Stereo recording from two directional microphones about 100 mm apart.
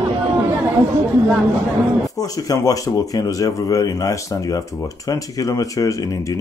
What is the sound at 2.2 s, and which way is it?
Speech, 35° left (ahead or behind).